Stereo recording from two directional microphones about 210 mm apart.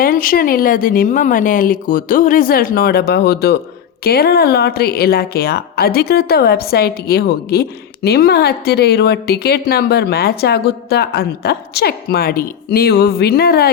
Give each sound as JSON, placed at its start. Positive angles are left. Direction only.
{"t": 0.0, "sound": "speech", "side_deg": 40}